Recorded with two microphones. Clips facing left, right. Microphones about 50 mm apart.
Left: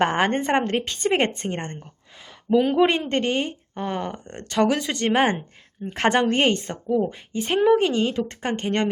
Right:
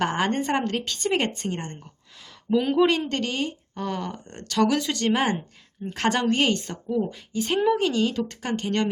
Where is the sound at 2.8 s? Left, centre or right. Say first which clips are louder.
Left 2 dB; left.